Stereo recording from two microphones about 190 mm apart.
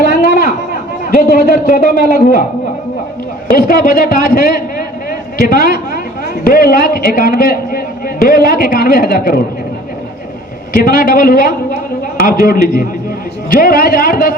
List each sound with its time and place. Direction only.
0.1 s a sound: 50° left (ahead or behind)
1.1 s a man's voice: 45° left (ahead or behind)
3.5 s a man's voice: 50° left (ahead or behind)
10.7 s a man's voice: 50° left (ahead or behind)